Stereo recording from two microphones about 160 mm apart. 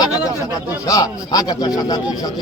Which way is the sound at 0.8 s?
20° left (ahead or behind).